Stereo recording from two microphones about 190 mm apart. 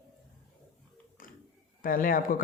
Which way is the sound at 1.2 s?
45° left (ahead or behind).